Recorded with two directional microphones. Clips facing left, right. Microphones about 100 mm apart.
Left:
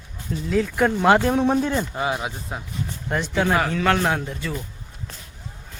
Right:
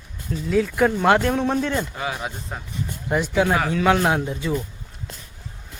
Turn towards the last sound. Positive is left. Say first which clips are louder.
# right 3 dB
turn(degrees=-15)  # may be behind; listen again after turning